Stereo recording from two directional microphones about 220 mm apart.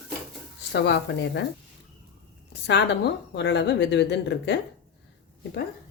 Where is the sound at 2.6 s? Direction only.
50° left (ahead or behind).